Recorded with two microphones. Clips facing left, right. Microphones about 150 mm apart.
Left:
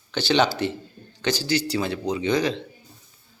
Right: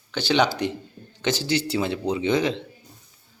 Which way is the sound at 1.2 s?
25° right (ahead or behind).